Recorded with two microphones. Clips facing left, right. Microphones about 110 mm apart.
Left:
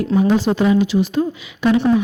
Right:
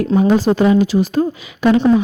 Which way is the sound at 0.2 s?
45° right (ahead or behind).